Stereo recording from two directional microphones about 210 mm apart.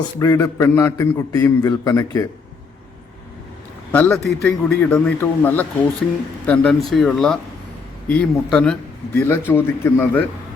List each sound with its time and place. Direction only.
0.2 s a man's voice: 15° left (ahead or behind)
3.9 s a man's voice: 5° left (ahead or behind)